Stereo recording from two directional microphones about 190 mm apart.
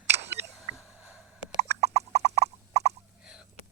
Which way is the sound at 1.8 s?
35° right (ahead or behind).